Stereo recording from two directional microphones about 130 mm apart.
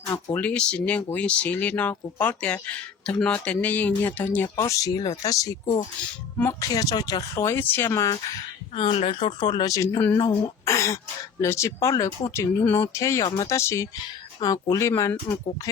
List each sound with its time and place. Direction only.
0.3 s speech: 10° left (ahead or behind)
8.7 s speech: 45° left (ahead or behind); by 15.1 s 25° left (ahead or behind)